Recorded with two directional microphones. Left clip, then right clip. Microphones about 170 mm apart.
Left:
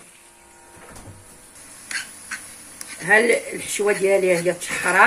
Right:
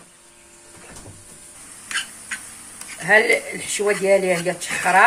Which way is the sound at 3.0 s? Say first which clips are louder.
Right 1 dB; 35° left (ahead or behind).